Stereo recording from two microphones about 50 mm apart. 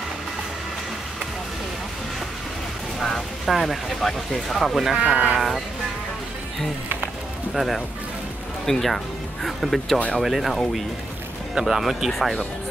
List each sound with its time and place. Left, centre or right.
3.0 s speech: centre
5.0 s speech: right
7.5 s speech: centre
11.5 s speech: centre